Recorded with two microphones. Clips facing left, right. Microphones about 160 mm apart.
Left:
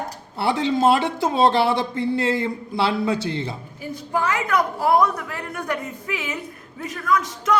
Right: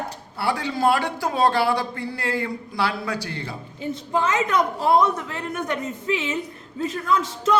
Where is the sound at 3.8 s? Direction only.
25° right (ahead or behind).